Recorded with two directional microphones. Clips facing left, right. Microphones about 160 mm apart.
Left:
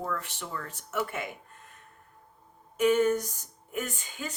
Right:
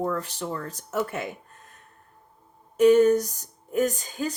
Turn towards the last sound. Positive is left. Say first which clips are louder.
# right 11 dB
turn(degrees=-40)  # may be behind; listen again after turning